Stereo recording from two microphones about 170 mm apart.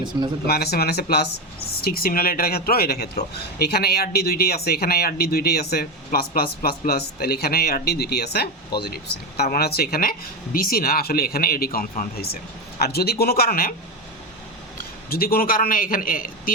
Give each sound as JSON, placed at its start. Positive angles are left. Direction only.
{"t": 0.4, "sound": "speech", "side_deg": 70}
{"t": 15.1, "sound": "speech", "side_deg": 60}